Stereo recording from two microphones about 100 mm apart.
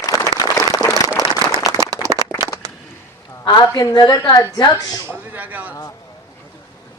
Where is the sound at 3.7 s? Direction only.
40° left (ahead or behind).